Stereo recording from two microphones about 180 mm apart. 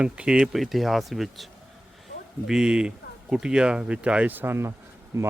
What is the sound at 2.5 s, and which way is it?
A man's voice, 5° right (ahead or behind).